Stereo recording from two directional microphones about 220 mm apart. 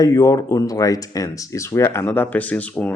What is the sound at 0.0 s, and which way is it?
Speech, 15° left (ahead or behind).